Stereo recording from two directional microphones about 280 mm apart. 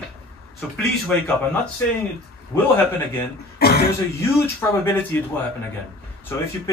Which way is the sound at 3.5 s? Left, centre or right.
Left.